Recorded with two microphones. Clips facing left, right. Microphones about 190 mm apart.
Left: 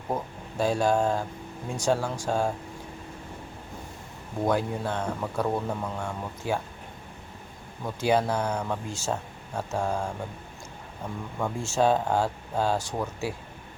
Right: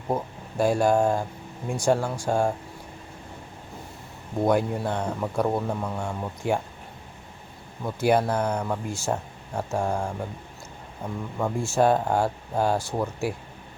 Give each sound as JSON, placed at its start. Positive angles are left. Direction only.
{"t": 0.1, "sound": "speech", "side_deg": -10}
{"t": 4.4, "sound": "speech", "side_deg": -15}
{"t": 7.9, "sound": "speech", "side_deg": -10}